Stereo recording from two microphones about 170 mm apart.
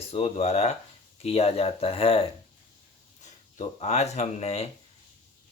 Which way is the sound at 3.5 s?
40° left (ahead or behind).